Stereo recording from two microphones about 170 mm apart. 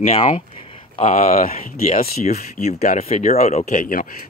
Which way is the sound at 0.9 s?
40° left (ahead or behind).